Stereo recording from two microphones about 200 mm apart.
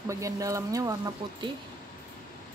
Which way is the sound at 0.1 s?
15° right (ahead or behind).